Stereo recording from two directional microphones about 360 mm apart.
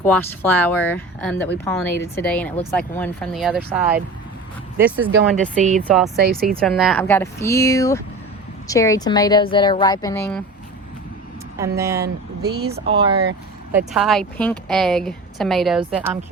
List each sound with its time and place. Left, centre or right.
0.0 s speech: centre
5.5 s speech: centre
6.6 s a woman's voice: centre
11.8 s speech: centre
12.0 s speech: right
12.9 s speech: centre
13.7 s speech: centre